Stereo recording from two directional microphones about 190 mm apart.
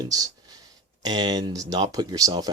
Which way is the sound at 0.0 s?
20° right (ahead or behind).